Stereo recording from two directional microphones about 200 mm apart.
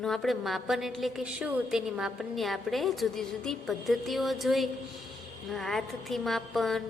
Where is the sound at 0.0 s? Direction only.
Centre (ahead or behind).